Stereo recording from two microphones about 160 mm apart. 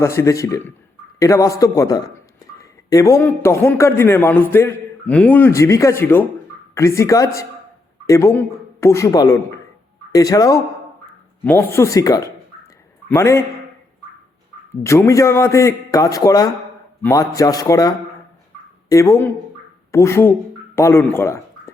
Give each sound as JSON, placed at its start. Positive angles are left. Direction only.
{"t": 0.0, "sound": "a man's voice", "side_deg": 15}
{"t": 14.8, "sound": "a man's voice", "side_deg": 20}